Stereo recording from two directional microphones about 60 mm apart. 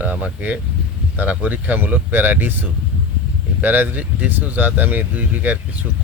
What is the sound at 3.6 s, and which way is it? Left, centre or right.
Speech, right.